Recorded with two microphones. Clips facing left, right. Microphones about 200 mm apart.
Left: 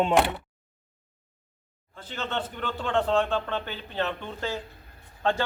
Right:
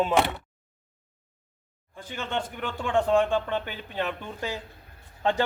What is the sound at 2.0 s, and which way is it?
A man's voice, 10° right (ahead or behind).